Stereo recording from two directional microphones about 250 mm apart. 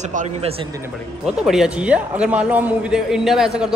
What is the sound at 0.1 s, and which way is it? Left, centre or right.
Speech, right.